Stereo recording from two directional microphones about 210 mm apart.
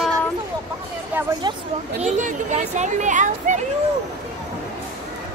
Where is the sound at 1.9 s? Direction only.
35° right (ahead or behind).